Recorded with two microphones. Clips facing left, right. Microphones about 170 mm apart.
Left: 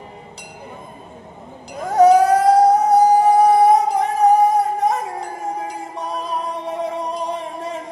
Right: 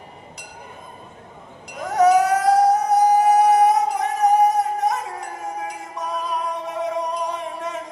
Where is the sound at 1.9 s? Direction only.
30° left (ahead or behind).